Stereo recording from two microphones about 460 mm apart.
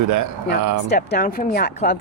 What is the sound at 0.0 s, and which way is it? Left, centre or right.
Speech, right.